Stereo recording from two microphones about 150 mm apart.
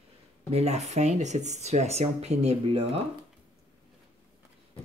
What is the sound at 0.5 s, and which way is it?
Speech, 45° right (ahead or behind).